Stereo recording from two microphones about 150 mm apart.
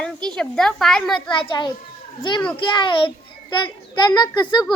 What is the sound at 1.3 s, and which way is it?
A child's voice, 35° left (ahead or behind).